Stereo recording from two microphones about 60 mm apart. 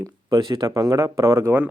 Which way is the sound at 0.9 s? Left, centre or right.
Right.